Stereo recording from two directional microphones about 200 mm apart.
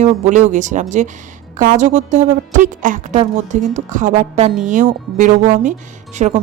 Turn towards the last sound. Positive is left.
turn(degrees=-35)  # may be behind; listen again after turning